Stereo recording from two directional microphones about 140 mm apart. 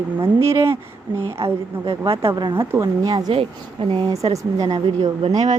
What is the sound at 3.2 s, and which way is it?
Speech, 40° right (ahead or behind).